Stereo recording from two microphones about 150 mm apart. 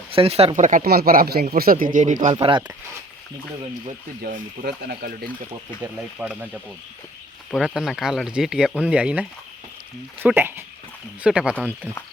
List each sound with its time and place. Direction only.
0.1 s speech: 40° right (ahead or behind)
0.6 s speech: 70° right (ahead or behind)
2.3 s speech: 35° right (ahead or behind)
4.2 s speech: 70° right (ahead or behind)
5.8 s speech: 10° right (ahead or behind)
7.5 s speech: centre (ahead or behind)